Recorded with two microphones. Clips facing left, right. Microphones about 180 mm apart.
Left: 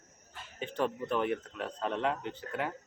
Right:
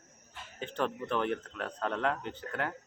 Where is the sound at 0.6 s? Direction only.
10° left (ahead or behind).